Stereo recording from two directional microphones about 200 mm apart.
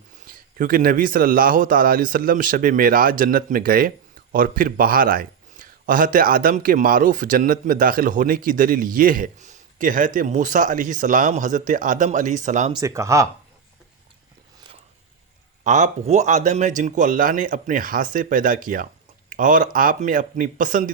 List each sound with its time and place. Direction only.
0.3 s a man's voice: 45° right (ahead or behind)
12.7 s speech: 15° right (ahead or behind)
15.6 s a man's voice: 40° right (ahead or behind)